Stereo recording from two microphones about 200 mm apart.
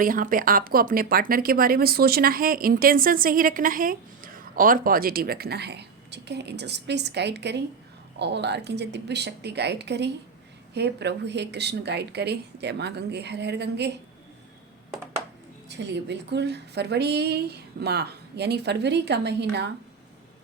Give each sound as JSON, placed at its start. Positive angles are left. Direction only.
{"t": 0.0, "sound": "a woman's voice", "side_deg": -45}
{"t": 15.7, "sound": "a woman's voice", "side_deg": -60}